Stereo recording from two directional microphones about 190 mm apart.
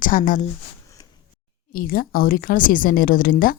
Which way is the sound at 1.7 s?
50° left (ahead or behind).